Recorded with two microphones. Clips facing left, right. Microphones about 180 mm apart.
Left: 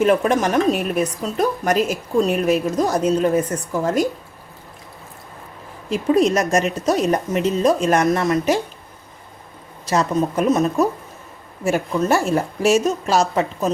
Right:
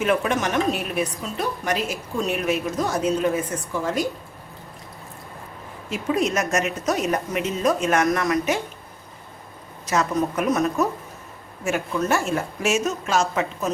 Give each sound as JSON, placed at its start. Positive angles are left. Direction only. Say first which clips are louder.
{"t": 0.0, "sound": "a woman's voice", "louder": "left 5 dB", "side_deg": 35}
{"t": 5.9, "sound": "a woman's voice", "louder": "left 6 dB", "side_deg": 35}
{"t": 9.8, "sound": "a woman's voice", "louder": "left 3 dB", "side_deg": 30}